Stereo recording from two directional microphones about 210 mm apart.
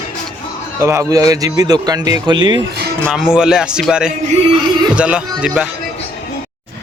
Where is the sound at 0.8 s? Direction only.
15° right (ahead or behind).